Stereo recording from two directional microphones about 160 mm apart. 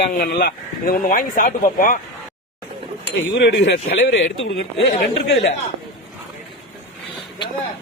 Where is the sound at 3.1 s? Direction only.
90° left.